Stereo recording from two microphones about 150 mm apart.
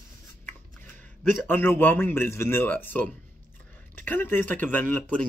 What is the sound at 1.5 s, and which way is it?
Speech, 15° left (ahead or behind).